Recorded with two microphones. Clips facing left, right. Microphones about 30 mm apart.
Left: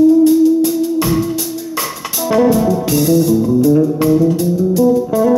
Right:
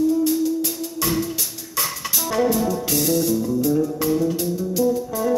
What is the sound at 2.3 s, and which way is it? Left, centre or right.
Music, left.